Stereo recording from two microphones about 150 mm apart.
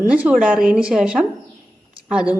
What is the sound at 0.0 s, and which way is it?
A woman's voice, 10° right (ahead or behind).